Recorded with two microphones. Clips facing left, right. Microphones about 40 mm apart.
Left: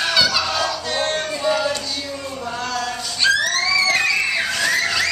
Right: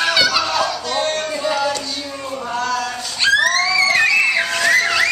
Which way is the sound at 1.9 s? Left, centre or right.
Centre.